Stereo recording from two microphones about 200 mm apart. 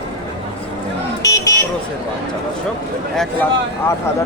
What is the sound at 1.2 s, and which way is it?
Vehicle, 15° left (ahead or behind).